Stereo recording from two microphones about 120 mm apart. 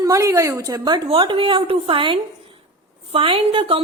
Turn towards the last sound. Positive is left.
turn(degrees=-50)  # may be behind; listen again after turning